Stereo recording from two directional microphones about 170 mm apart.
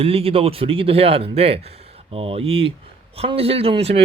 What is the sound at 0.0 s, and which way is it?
Speech, 35° right (ahead or behind).